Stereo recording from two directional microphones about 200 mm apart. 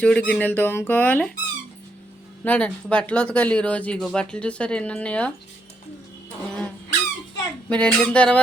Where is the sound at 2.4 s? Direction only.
10° left (ahead or behind).